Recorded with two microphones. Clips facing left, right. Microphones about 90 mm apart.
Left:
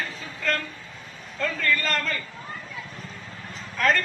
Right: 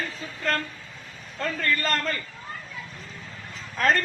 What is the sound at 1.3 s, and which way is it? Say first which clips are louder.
Speech: left 1 dB; 35° right (ahead or behind).